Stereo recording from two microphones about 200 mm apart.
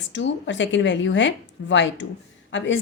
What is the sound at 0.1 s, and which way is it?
A woman's voice, 65° left (ahead or behind).